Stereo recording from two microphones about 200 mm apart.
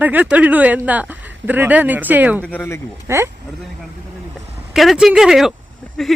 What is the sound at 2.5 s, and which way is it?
Speech, 10° left (ahead or behind).